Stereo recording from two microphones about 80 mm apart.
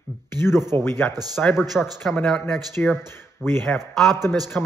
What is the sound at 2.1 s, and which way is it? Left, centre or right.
Speech, centre.